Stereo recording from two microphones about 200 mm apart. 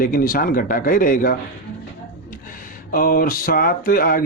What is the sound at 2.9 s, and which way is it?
Speech, 45° left (ahead or behind).